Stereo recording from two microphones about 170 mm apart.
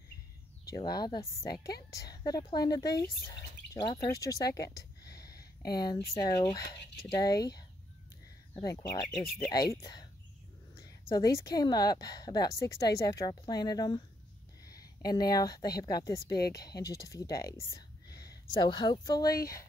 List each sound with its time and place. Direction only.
0.7 s a woman's voice: 25° left (ahead or behind)
4.1 s a woman's voice: 20° left (ahead or behind)
5.8 s a woman's voice: 25° left (ahead or behind)
8.5 s a woman's voice: 25° left (ahead or behind)